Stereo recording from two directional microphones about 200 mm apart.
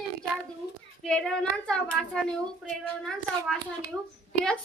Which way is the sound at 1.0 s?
5° left (ahead or behind).